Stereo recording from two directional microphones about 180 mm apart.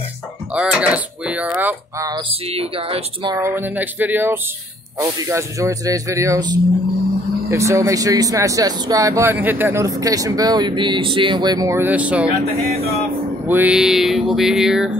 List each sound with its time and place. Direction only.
0.6 s speech: 5° right (ahead or behind)
2.5 s speech: 35° right (ahead or behind)
3.3 s speech: 15° right (ahead or behind)
13.5 s speech: 10° right (ahead or behind)